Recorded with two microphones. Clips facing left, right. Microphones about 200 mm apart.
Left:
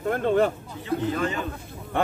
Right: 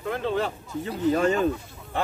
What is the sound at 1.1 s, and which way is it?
Speech, 40° right (ahead or behind).